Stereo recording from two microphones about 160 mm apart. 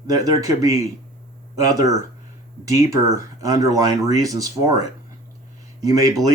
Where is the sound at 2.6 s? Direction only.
20° right (ahead or behind).